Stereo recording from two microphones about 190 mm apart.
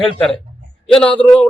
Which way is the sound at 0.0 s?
5° left (ahead or behind).